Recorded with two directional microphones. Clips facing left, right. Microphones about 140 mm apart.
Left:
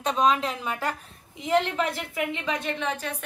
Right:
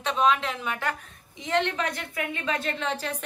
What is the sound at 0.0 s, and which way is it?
Speech, 40° left (ahead or behind).